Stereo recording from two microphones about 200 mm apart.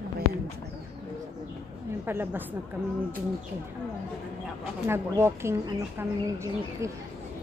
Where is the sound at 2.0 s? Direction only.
10° right (ahead or behind).